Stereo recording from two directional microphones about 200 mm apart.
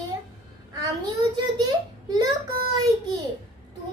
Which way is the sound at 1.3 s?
20° right (ahead or behind).